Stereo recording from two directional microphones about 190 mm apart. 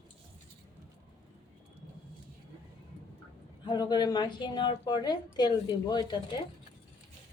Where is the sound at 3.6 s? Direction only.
25° left (ahead or behind).